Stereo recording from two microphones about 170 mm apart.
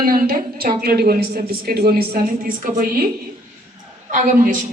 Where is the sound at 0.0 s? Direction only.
55° right (ahead or behind).